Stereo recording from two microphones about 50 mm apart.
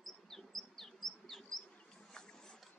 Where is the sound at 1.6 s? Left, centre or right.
Left.